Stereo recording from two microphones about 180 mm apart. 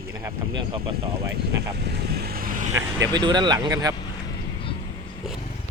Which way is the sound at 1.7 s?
65° right (ahead or behind).